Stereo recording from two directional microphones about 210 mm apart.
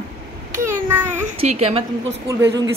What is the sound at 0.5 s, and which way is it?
Speech, 10° right (ahead or behind).